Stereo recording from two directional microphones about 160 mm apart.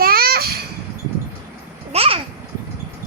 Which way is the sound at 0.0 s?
70° right (ahead or behind).